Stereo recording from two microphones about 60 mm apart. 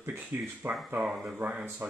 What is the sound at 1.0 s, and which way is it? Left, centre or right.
Speech, centre.